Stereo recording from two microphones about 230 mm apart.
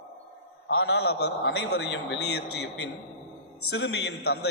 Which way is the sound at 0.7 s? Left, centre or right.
Left.